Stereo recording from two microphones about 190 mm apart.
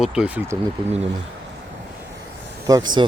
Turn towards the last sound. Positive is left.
turn(degrees=-20)  # may be behind; listen again after turning